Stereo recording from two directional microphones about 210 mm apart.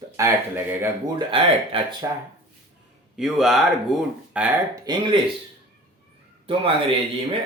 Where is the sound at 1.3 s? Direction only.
25° right (ahead or behind).